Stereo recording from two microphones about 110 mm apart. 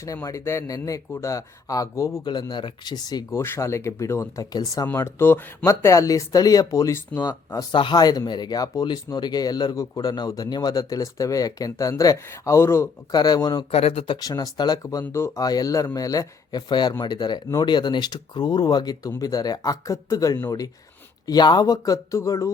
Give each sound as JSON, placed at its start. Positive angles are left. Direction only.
{"t": 0.0, "sound": "speech", "side_deg": 30}
{"t": 2.2, "sound": "speech", "side_deg": 45}
{"t": 3.3, "sound": "speech", "side_deg": 20}
{"t": 4.9, "sound": "speech", "side_deg": 25}
{"t": 7.2, "sound": "speech", "side_deg": 35}
{"t": 13.1, "sound": "speech", "side_deg": 40}
{"t": 13.7, "sound": "speech", "side_deg": 60}
{"t": 14.2, "sound": "speech", "side_deg": 35}
{"t": 15.1, "sound": "speech", "side_deg": 25}